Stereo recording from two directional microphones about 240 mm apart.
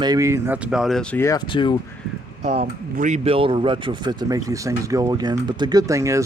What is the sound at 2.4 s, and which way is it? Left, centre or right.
Speech, right.